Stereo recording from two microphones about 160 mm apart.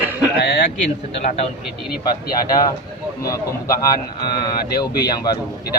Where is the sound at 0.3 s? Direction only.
90° left.